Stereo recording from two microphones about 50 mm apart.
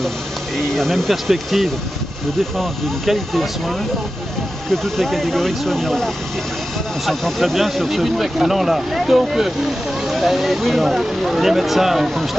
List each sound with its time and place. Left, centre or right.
0.7 s speech: centre